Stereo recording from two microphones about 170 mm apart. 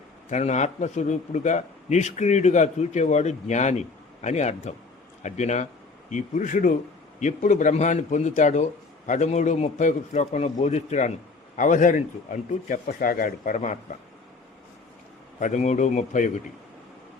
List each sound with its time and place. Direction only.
0.3 s a man's voice: 45° left (ahead or behind)
15.4 s a man's voice: 45° left (ahead or behind)